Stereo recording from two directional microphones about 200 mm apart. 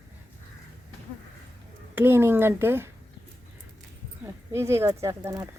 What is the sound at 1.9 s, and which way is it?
Speech, 10° right (ahead or behind).